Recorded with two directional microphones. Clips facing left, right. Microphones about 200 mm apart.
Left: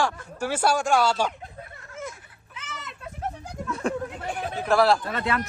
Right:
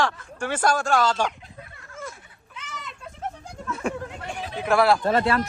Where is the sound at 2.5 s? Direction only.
5° left (ahead or behind).